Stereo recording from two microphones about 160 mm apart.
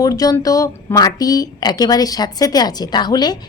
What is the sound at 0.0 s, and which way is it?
A woman's voice, 20° left (ahead or behind).